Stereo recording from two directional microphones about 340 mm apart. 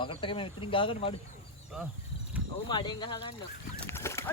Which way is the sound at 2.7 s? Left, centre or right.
Centre.